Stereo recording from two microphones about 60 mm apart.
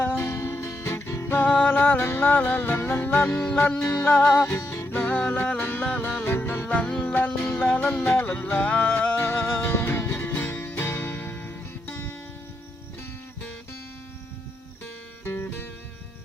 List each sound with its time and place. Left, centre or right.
0.0 s music: left
1.3 s music: left
1.8 s music: left
3.2 s music: centre
4.0 s music: left
4.6 s music: left
4.9 s music: left
6.7 s music: centre
7.1 s music: left
8.3 s music: left
15.2 s music: left